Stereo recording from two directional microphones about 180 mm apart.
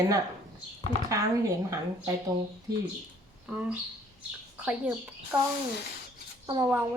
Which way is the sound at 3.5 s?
5° right (ahead or behind).